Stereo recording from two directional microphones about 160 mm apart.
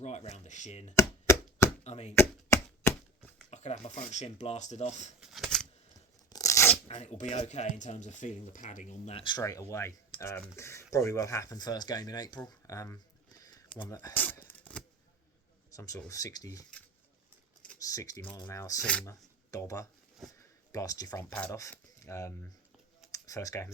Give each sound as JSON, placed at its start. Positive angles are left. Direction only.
{"t": 0.0, "sound": "speech", "side_deg": 45}
{"t": 0.9, "sound": "chopping", "side_deg": 15}
{"t": 1.8, "sound": "speech", "side_deg": 45}
{"t": 2.1, "sound": "chopping", "side_deg": 15}
{"t": 3.5, "sound": "speech", "side_deg": 45}
{"t": 5.2, "sound": "a sound", "side_deg": 0}
{"t": 6.3, "sound": "a sound", "side_deg": 20}
{"t": 6.8, "sound": "speech", "side_deg": 40}
{"t": 9.2, "sound": "speech", "side_deg": 25}
{"t": 12.5, "sound": "a sound", "side_deg": 20}
{"t": 13.8, "sound": "shuffling cards", "side_deg": 15}
{"t": 15.7, "sound": "speech", "side_deg": 20}
{"t": 17.7, "sound": "speech", "side_deg": 20}